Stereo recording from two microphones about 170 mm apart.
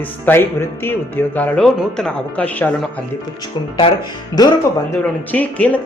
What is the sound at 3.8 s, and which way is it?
Speech, 30° left (ahead or behind).